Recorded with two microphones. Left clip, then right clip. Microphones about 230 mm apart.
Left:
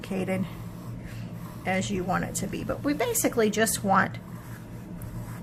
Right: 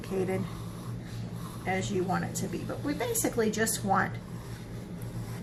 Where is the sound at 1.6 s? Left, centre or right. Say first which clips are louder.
Left 2 dB; left.